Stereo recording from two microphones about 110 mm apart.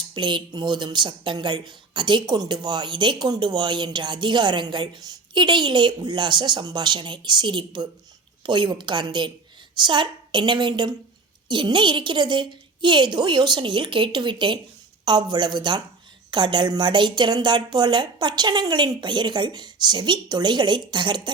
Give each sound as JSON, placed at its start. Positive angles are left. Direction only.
{"t": 0.1, "sound": "a woman's voice", "side_deg": -45}